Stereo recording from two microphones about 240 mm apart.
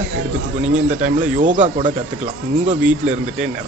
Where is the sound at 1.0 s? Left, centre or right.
Right.